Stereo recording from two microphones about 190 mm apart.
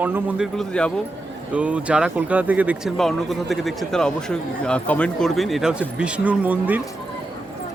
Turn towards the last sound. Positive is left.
turn(degrees=-10)  # may be behind; listen again after turning